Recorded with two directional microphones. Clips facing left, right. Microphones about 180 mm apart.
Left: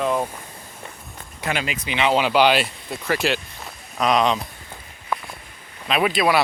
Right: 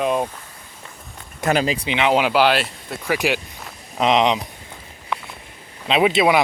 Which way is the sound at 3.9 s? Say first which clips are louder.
Right 2 dB; 25° right (ahead or behind).